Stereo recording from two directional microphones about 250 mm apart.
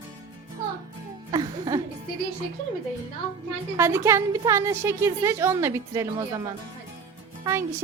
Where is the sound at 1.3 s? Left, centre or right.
Centre.